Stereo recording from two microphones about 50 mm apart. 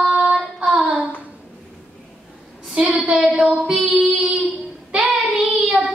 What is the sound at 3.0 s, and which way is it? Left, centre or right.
Child singing, right.